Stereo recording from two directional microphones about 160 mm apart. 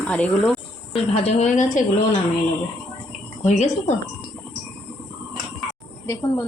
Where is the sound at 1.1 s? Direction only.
45° left (ahead or behind).